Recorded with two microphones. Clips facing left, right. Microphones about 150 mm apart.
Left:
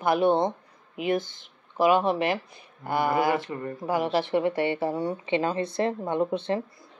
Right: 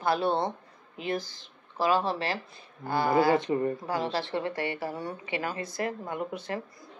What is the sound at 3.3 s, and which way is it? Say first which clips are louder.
Speech: right 3 dB; 20° right (ahead or behind).